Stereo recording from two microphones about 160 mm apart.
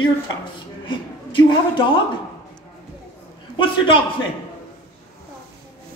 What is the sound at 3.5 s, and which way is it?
Speech, 30° left (ahead or behind).